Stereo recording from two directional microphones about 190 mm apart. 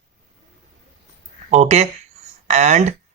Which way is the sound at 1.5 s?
35° right (ahead or behind).